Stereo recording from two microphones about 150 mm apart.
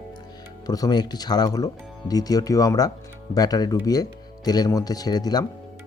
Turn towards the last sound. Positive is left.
turn(degrees=25)  # may be behind; listen again after turning